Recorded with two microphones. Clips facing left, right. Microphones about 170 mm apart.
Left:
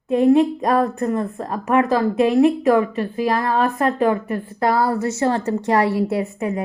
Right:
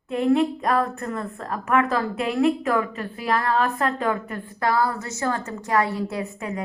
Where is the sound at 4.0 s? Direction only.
30° left (ahead or behind).